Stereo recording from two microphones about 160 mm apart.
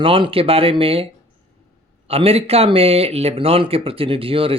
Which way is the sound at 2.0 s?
40° right (ahead or behind).